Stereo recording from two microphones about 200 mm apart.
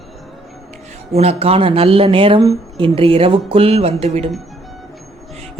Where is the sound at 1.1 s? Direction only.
30° right (ahead or behind).